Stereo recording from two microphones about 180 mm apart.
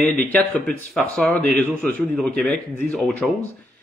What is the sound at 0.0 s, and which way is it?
A man's voice, 10° left (ahead or behind).